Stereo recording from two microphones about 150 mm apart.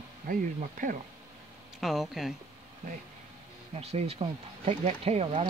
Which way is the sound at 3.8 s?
45° right (ahead or behind).